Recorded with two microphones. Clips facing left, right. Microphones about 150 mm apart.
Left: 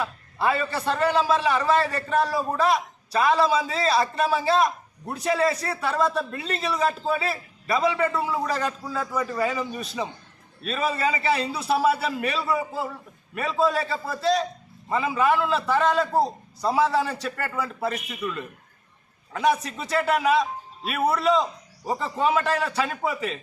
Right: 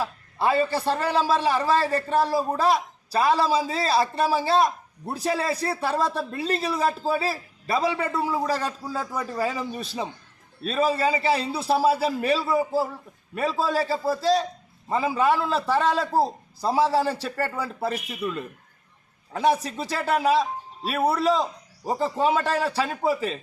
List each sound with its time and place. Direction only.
0.0 s a man's voice: 30° right (ahead or behind)